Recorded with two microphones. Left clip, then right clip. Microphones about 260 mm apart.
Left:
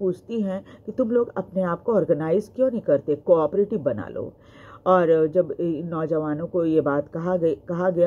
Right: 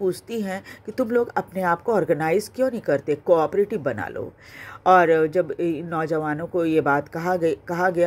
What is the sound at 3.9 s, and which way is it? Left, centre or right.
Speech, right.